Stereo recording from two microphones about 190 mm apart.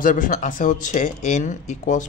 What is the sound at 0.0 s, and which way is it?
Speech, 45° left (ahead or behind).